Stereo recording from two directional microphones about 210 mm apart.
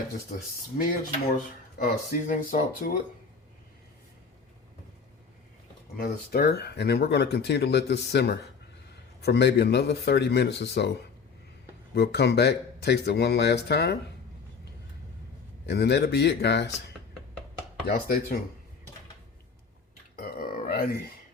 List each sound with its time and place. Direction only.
0.7 s speech: 45° left (ahead or behind)
6.0 s speech: 50° left (ahead or behind)
11.9 s speech: 55° left (ahead or behind)
15.6 s speech: 50° left (ahead or behind)
17.8 s speech: 45° left (ahead or behind)
20.1 s burping: 45° left (ahead or behind)